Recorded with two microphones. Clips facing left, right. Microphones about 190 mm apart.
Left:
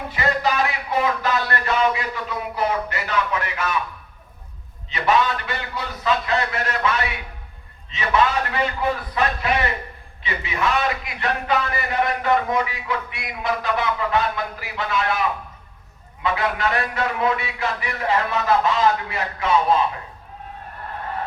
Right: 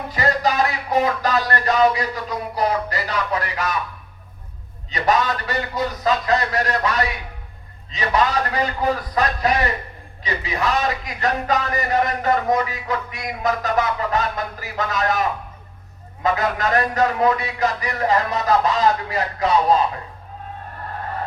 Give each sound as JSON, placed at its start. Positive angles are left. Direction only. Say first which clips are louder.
{"t": 0.1, "sound": "music", "louder": "right 2 dB", "side_deg": -40}
{"t": 4.9, "sound": "a man's voice", "louder": "even", "side_deg": -40}